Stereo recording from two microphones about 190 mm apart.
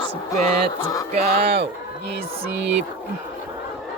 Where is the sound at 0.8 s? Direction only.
20° left (ahead or behind).